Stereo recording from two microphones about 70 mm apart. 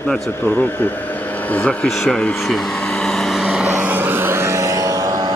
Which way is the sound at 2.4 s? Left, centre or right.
Centre.